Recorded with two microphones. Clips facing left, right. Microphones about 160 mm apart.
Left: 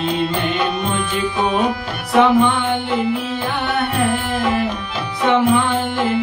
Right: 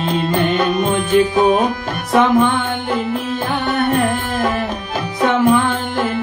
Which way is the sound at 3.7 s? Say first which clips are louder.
Right 3 dB; 45° right (ahead or behind).